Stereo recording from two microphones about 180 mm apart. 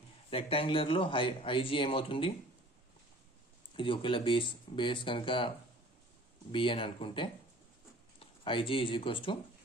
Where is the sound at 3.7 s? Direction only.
30° left (ahead or behind).